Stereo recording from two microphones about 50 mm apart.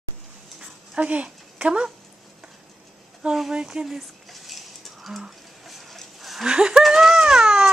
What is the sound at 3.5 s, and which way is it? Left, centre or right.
Speech, centre.